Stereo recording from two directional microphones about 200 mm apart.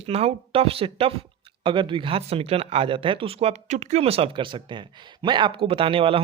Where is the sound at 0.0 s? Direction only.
30° right (ahead or behind).